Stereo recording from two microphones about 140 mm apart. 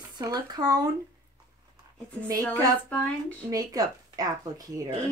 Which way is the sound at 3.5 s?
25° right (ahead or behind).